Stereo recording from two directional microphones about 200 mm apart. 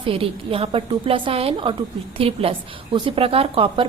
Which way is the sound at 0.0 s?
30° right (ahead or behind).